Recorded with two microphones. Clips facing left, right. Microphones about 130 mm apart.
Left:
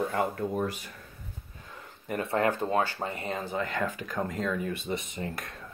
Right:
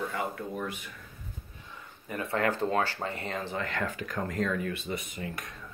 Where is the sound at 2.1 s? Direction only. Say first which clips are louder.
Left 2 dB; 30° left (ahead or behind).